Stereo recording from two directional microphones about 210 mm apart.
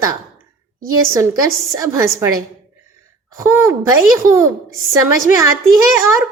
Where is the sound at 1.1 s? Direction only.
15° right (ahead or behind).